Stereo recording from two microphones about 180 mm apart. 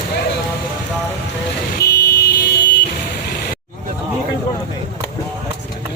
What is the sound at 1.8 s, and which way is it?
Vehicle, 70° left (ahead or behind).